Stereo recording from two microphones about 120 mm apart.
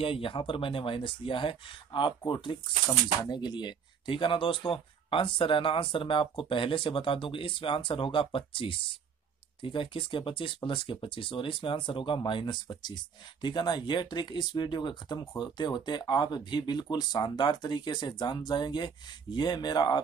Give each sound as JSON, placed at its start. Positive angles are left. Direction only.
{"t": 0.0, "sound": "speech", "side_deg": 50}